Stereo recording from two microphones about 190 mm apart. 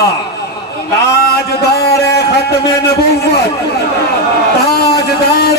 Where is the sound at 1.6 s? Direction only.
55° left (ahead or behind).